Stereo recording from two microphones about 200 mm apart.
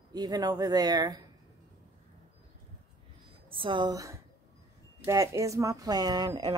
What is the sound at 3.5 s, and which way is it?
Speech, 25° right (ahead or behind).